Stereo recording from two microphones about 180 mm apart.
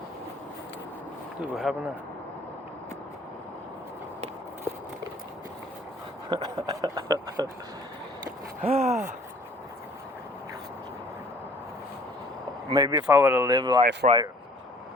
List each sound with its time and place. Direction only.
1.7 s a man's voice: centre (ahead or behind)
6.3 s speech: 25° right (ahead or behind)
8.6 s a sound: 35° right (ahead or behind)
12.7 s speech: 20° right (ahead or behind)
13.1 s speech: 10° right (ahead or behind)
13.5 s speech: 25° right (ahead or behind)
14.0 s speech: 45° right (ahead or behind)